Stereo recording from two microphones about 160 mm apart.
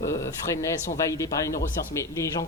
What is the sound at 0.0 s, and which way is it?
Speech, 20° left (ahead or behind).